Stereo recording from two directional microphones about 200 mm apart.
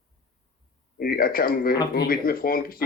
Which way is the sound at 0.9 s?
45° left (ahead or behind).